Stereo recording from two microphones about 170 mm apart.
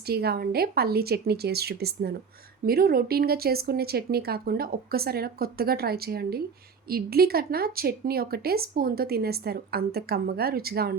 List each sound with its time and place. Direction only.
0.1 s speech: 65° right (ahead or behind)